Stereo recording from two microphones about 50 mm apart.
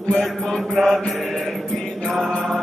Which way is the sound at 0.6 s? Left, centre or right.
Centre.